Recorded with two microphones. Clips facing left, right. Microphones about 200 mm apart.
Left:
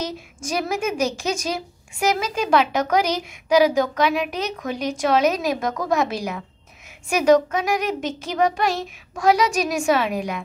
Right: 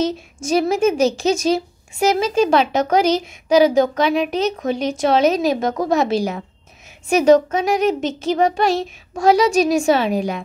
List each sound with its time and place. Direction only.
0.0 s a woman's voice: 25° right (ahead or behind)